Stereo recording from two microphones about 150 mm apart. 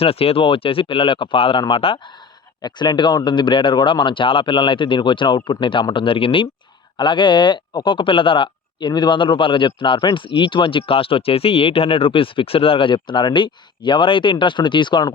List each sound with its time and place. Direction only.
0.0 s speech: 40° left (ahead or behind)